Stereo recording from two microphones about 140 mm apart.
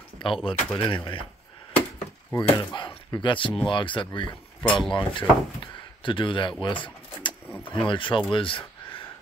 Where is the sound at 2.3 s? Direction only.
15° left (ahead or behind).